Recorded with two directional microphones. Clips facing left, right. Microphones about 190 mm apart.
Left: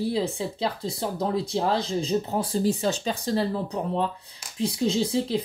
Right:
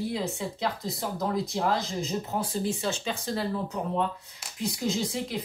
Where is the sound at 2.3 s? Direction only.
40° left (ahead or behind).